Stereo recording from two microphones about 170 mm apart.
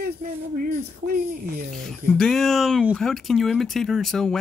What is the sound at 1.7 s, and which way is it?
Speech, centre (ahead or behind).